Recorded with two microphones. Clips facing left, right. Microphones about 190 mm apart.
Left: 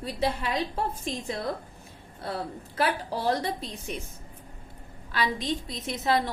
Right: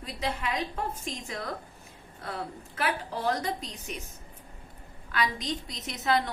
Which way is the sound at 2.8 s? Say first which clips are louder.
Left 3 dB; 30° left (ahead or behind).